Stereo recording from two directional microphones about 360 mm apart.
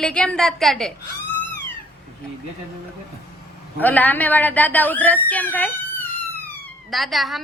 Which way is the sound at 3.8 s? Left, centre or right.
Centre.